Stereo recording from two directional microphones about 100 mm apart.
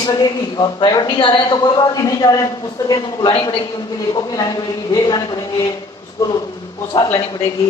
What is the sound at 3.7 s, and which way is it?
A man's voice, 40° left (ahead or behind).